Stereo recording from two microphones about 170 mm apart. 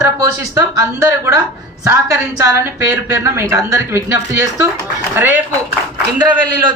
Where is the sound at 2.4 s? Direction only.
15° right (ahead or behind).